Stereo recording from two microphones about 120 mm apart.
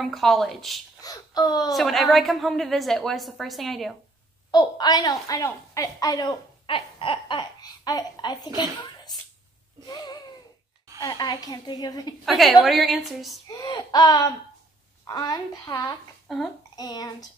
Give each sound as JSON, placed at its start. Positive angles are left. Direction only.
{"t": 0.0, "sound": "a woman's voice", "side_deg": 0}
{"t": 1.0, "sound": "a child's voice", "side_deg": 35}
{"t": 1.7, "sound": "a woman's voice", "side_deg": 0}
{"t": 4.5, "sound": "a woman's voice", "side_deg": 35}
{"t": 6.6, "sound": "speech", "side_deg": 45}
{"t": 9.8, "sound": "a sound", "side_deg": 35}
{"t": 11.0, "sound": "a woman's voice", "side_deg": 35}
{"t": 12.3, "sound": "a woman's voice", "side_deg": 0}
{"t": 13.5, "sound": "a woman's voice", "side_deg": 35}